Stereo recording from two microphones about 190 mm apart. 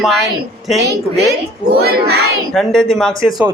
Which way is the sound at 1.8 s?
55° right (ahead or behind).